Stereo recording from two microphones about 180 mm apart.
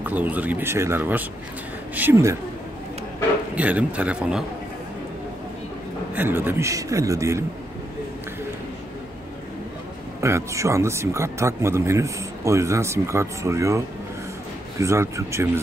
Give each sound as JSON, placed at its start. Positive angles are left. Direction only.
{"t": 0.0, "sound": "speech", "side_deg": -10}
{"t": 3.5, "sound": "speech", "side_deg": -10}
{"t": 6.1, "sound": "speech", "side_deg": -10}
{"t": 10.2, "sound": "speech", "side_deg": -15}